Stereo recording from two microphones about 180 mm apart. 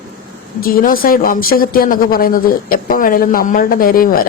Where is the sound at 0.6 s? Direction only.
55° left (ahead or behind).